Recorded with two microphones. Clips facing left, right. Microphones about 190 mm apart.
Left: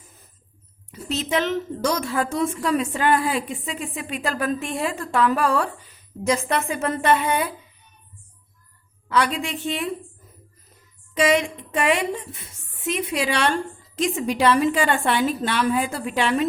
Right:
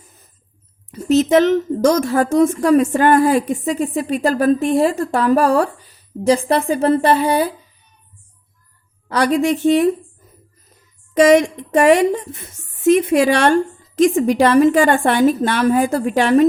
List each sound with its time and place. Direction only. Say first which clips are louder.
0.9 s a woman's voice: right 12 dB; 45° right (ahead or behind)
9.0 s a woman's voice: right 7 dB; 40° right (ahead or behind)
11.1 s a woman's voice: right 9 dB; 45° right (ahead or behind)